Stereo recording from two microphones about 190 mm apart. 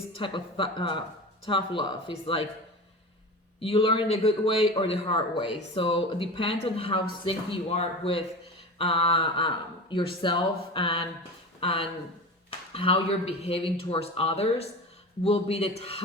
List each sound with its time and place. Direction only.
0.1 s a man's voice: 25° left (ahead or behind)
3.6 s a man's voice: 30° left (ahead or behind)